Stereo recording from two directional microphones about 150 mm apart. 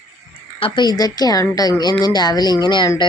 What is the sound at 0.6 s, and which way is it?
A woman's voice, 30° left (ahead or behind).